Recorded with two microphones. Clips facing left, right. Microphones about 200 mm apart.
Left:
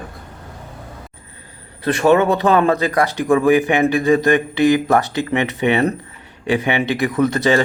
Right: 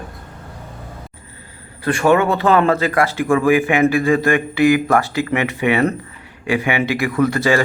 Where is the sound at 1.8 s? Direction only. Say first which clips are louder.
Left 1 dB; 20° left (ahead or behind).